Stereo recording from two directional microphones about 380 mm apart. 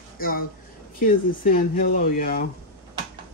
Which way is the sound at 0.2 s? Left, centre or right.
Left.